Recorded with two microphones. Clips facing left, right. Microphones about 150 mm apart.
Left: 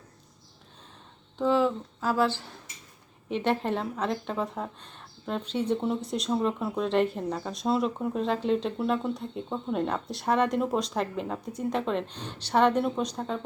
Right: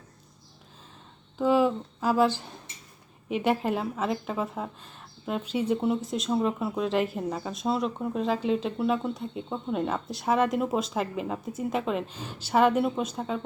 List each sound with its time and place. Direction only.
1.4 s a woman's voice: 10° right (ahead or behind)